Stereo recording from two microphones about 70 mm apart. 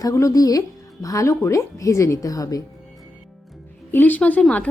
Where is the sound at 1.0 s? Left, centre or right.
Left.